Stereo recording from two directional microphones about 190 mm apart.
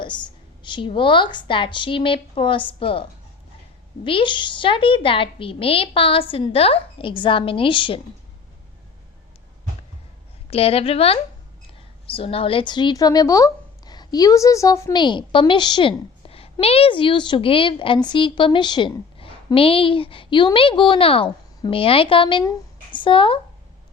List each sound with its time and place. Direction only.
0.0 s a woman's voice: 25° left (ahead or behind)
10.5 s a woman's voice: 30° left (ahead or behind)